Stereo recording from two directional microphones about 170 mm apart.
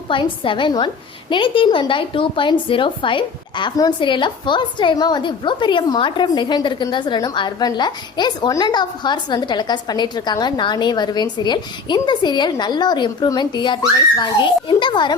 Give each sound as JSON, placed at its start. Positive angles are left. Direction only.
{"t": 0.1, "sound": "a woman's voice", "side_deg": 30}